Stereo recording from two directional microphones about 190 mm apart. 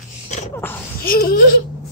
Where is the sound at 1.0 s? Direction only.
50° left (ahead or behind).